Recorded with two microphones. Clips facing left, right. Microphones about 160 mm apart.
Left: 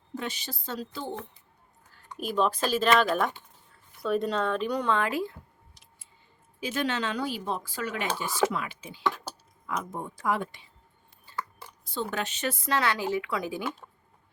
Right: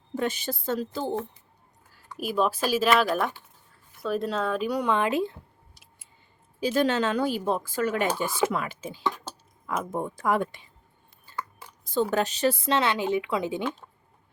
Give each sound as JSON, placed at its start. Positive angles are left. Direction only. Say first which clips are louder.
{"t": 0.2, "sound": "speech", "louder": "right 8 dB", "side_deg": -50}
{"t": 2.1, "sound": "speech", "louder": "right 1 dB", "side_deg": -5}
{"t": 5.7, "sound": "a sound", "louder": "right 1 dB", "side_deg": -5}
{"t": 6.6, "sound": "speech", "louder": "right 6 dB", "side_deg": -35}
{"t": 12.1, "sound": "speech", "louder": "right 7 dB", "side_deg": -40}